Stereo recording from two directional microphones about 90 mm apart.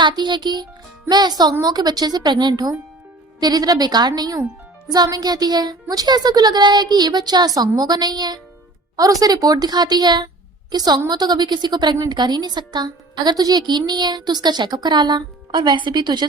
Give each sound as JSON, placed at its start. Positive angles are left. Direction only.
{"t": 0.0, "sound": "a child's voice", "side_deg": -55}